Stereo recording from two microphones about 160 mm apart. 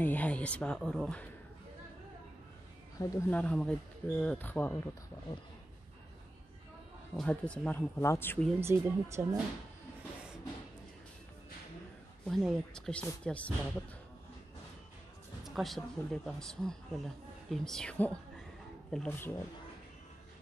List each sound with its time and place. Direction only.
0.0 s speech: 10° left (ahead or behind)
3.0 s speech: 15° left (ahead or behind)
7.2 s speech: 5° left (ahead or behind)
8.5 s speech: 15° right (ahead or behind)
12.3 s speech: centre (ahead or behind)
15.4 s speech: centre (ahead or behind)